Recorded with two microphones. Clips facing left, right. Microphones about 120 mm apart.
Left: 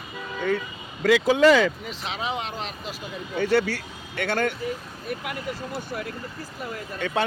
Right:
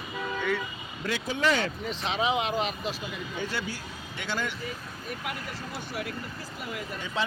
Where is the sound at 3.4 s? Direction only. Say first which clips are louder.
Left 13 dB; 70° left (ahead or behind).